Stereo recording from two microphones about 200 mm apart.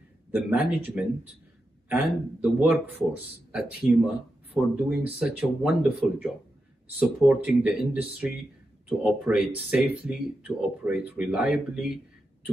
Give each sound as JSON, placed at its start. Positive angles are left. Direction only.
{"t": 0.3, "sound": "a man's voice", "side_deg": -10}